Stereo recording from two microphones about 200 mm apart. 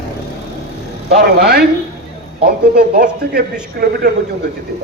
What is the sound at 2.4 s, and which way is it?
A man's voice, 45° right (ahead or behind).